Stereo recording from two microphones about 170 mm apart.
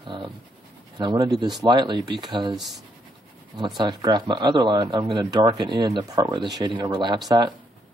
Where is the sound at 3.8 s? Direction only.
25° right (ahead or behind).